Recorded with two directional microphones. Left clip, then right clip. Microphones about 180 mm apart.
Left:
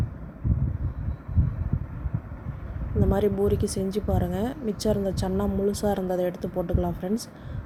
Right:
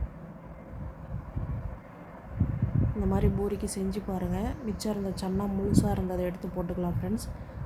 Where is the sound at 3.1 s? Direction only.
25° left (ahead or behind).